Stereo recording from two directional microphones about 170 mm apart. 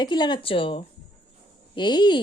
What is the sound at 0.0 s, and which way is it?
Speech, 25° left (ahead or behind).